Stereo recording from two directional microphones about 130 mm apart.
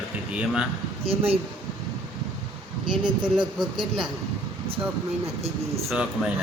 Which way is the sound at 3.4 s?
5° right (ahead or behind).